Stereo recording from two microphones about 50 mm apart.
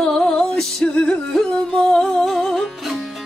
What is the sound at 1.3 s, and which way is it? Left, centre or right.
Music, centre.